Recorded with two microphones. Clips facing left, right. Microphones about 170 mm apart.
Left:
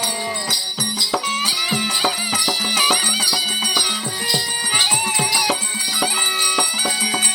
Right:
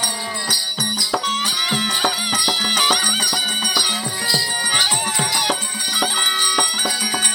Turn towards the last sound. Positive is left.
turn(degrees=10)  # may be behind; listen again after turning